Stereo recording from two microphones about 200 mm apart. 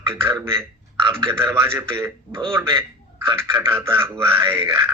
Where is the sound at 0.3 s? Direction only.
10° right (ahead or behind).